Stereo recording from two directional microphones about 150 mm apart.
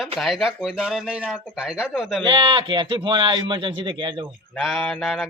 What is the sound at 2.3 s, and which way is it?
Speech, 35° right (ahead or behind).